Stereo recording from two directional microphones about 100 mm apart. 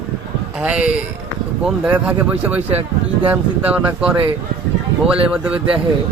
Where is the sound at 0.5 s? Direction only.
10° right (ahead or behind).